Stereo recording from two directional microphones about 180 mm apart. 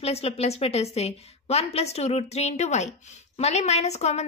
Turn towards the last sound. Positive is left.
turn(degrees=40)  # may be behind; listen again after turning